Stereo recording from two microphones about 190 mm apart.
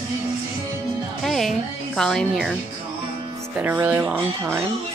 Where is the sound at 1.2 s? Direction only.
Centre (ahead or behind).